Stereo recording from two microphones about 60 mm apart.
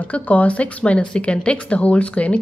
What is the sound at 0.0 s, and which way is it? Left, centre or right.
A woman's voice, left.